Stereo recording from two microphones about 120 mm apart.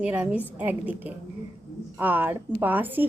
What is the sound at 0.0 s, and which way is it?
A woman's voice, 10° right (ahead or behind).